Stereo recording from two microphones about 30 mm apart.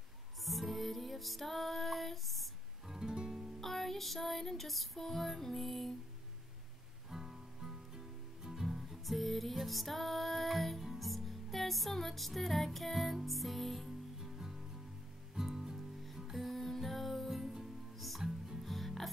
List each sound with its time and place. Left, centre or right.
0.5 s music: centre
3.1 s music: right
3.6 s music: centre
7.1 s music: centre
15.3 s music: centre
16.3 s music: centre
17.3 s music: centre